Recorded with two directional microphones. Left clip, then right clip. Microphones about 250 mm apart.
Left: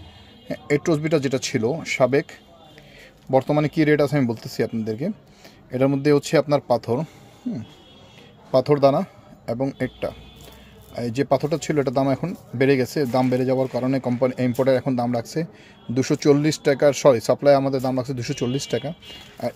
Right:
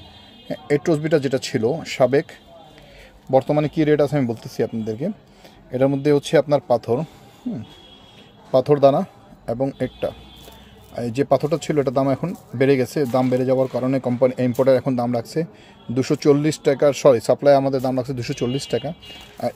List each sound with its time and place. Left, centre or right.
0.5 s speech: centre
3.3 s speech: centre
8.5 s a man's voice: centre